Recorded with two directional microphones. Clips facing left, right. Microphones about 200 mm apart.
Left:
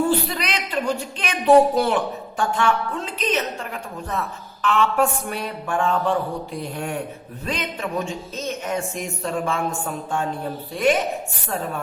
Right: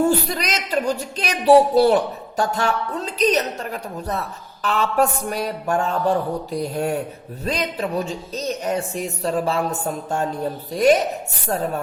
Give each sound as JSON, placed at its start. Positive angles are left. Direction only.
{"t": 0.3, "sound": "a woman's voice", "side_deg": -40}